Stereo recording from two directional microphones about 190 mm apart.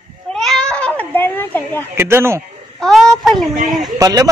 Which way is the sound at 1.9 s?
10° right (ahead or behind).